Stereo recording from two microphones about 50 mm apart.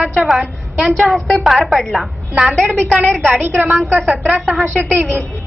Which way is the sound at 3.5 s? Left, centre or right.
Centre.